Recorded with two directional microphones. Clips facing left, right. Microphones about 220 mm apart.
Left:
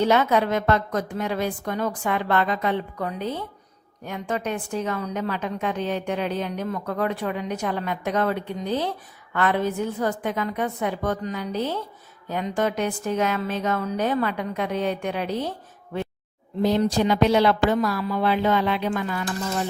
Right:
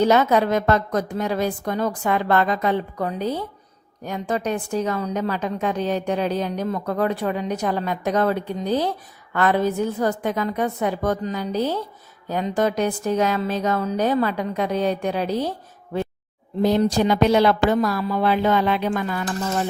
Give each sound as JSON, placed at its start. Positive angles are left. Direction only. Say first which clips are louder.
{"t": 0.0, "sound": "a woman's voice", "louder": "right 3 dB", "side_deg": -40}
{"t": 16.6, "sound": "a woman's voice", "louder": "right 2 dB", "side_deg": -45}